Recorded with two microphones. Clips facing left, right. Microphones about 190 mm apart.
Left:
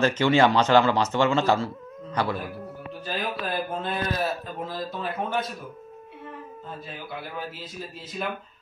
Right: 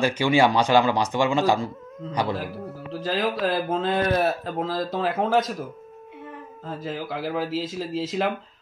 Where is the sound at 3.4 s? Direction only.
90° right.